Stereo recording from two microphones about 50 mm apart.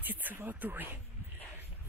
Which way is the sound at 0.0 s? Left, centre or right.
Right.